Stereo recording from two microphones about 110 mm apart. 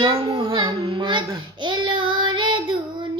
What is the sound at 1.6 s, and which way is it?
Child singing, 45° right (ahead or behind).